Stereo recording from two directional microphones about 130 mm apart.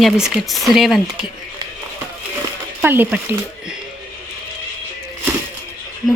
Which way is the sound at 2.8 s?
15° right (ahead or behind).